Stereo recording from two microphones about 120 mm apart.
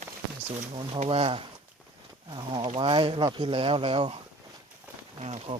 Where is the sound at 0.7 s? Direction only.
55° right (ahead or behind).